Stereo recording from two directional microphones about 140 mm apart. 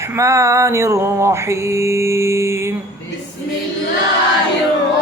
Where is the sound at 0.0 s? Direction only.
20° right (ahead or behind).